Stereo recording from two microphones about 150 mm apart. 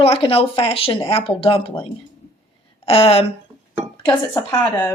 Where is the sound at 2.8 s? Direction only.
40° left (ahead or behind).